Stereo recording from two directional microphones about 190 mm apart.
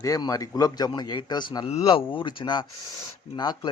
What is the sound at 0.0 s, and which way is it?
A man's voice, 20° left (ahead or behind).